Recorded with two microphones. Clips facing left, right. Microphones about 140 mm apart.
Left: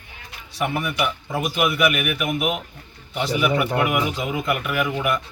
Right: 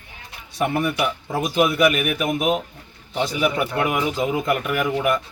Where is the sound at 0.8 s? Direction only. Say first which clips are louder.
Right 2 dB; 35° right (ahead or behind).